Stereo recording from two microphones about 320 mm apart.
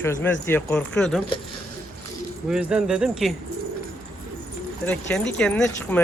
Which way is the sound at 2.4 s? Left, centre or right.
Centre.